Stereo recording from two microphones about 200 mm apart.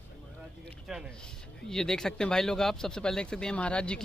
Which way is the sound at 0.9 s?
Centre (ahead or behind).